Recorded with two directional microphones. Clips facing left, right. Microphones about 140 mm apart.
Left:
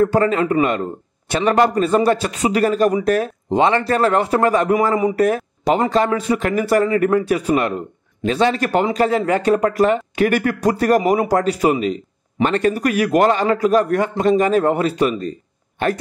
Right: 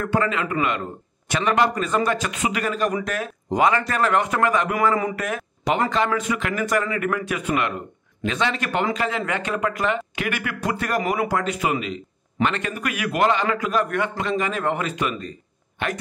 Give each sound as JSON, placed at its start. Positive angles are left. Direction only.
{"t": 0.0, "sound": "a man's voice", "side_deg": 40}